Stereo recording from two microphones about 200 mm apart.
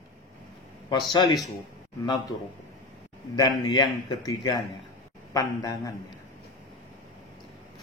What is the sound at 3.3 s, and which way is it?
A man's voice, 20° left (ahead or behind).